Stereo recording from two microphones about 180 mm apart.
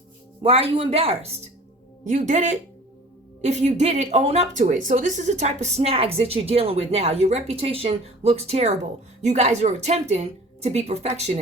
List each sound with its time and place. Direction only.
0.4 s a woman's voice: 30° right (ahead or behind)
2.0 s a woman's voice: 45° right (ahead or behind)